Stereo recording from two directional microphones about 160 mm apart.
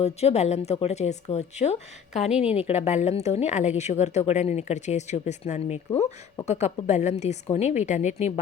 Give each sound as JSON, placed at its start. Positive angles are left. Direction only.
{"t": 0.0, "sound": "a woman's voice", "side_deg": 40}